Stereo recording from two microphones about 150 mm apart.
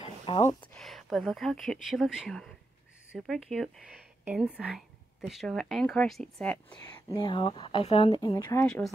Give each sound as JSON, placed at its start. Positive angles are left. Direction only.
{"t": 0.3, "sound": "speech", "side_deg": 35}
{"t": 0.7, "sound": "speech", "side_deg": 0}
{"t": 6.8, "sound": "speech", "side_deg": 30}
{"t": 8.6, "sound": "speech", "side_deg": 5}